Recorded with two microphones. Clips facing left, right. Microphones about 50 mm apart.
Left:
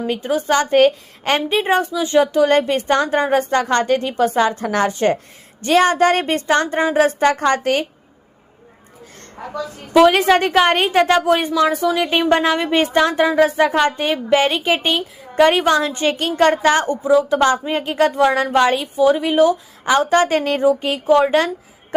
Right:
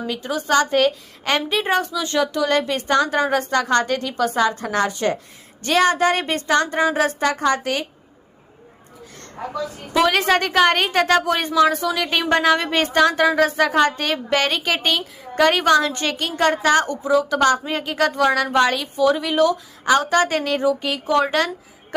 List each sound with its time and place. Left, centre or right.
0.1 s a woman's voice: left
2.2 s a woman's voice: left
10.1 s a woman's voice: centre
11.5 s a woman's voice: centre
16.1 s a woman's voice: left